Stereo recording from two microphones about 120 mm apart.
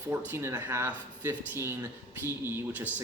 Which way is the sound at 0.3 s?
20° right (ahead or behind).